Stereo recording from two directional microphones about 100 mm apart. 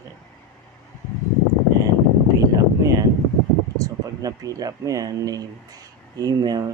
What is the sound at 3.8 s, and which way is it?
Speech, 35° right (ahead or behind).